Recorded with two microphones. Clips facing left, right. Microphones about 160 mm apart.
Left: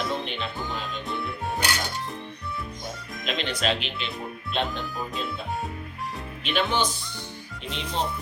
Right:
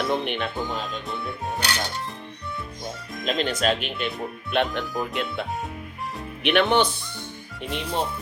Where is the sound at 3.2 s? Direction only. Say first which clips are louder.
Right 4 dB; 45° right (ahead or behind).